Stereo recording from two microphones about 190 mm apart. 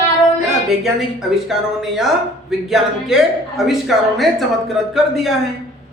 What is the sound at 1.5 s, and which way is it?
Speech, centre (ahead or behind).